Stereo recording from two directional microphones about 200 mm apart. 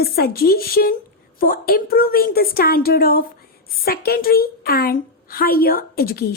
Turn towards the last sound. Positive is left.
turn(degrees=50)  # may be behind; listen again after turning